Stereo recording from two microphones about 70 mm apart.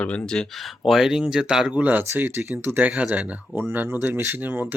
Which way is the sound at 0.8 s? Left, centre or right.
Centre.